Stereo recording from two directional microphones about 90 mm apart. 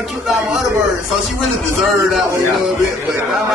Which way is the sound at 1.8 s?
Centre (ahead or behind).